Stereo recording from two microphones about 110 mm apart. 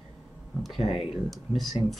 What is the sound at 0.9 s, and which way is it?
Speech, 55° left (ahead or behind).